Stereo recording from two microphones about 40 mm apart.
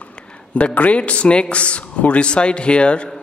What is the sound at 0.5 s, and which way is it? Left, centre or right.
A man's voice, left.